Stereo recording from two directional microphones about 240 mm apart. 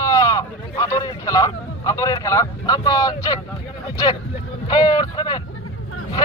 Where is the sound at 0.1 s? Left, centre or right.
Centre.